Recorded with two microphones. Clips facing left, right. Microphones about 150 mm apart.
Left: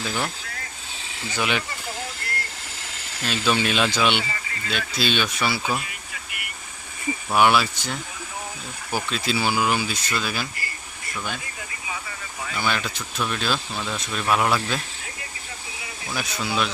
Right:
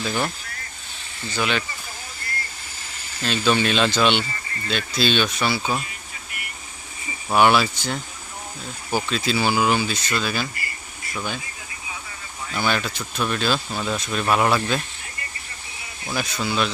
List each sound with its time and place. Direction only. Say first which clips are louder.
0.0 s speech: right 3 dB; centre (ahead or behind)
1.3 s speech: right 1 dB; 15° left (ahead or behind)
2.2 s vehicle: left 1 dB; 75° left (ahead or behind)
2.9 s a sound: right 3 dB; 80° left
3.2 s speech: right 3 dB; 5° left (ahead or behind)
7.3 s speech: right 2 dB; centre (ahead or behind)
9.0 s speech: right 1 dB; centre (ahead or behind)
12.5 s speech: right 3 dB; centre (ahead or behind)
16.1 s speech: right 2 dB; centre (ahead or behind)